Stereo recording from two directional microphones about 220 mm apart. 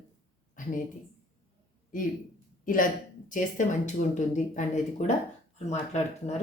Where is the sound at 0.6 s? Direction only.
35° left (ahead or behind).